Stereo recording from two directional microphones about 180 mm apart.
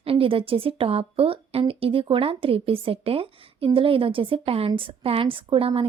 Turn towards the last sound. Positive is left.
turn(degrees=-30)  # may be behind; listen again after turning